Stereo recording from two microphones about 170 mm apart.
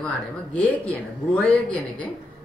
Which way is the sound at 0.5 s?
10° left (ahead or behind).